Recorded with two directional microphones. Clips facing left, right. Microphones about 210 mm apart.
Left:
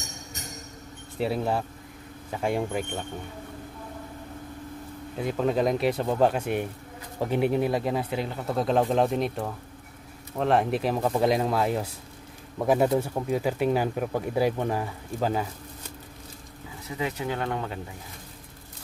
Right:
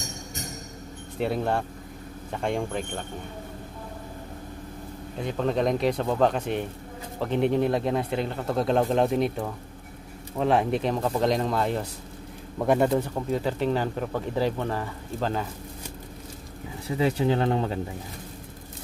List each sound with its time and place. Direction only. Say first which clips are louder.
1.2 s speech: right 1 dB; 5° left (ahead or behind)
5.2 s speech: left 1 dB; 5° left (ahead or behind)
17.0 s speech: right 6 dB; 30° right (ahead or behind)